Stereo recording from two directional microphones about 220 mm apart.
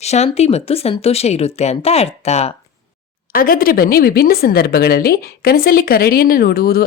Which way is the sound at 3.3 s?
40° left (ahead or behind).